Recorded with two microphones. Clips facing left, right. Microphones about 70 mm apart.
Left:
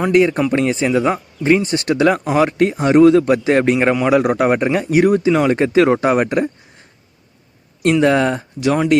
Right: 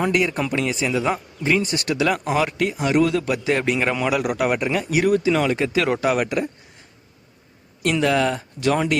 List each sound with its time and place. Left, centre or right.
0.1 s a man's voice: left
8.0 s a man's voice: left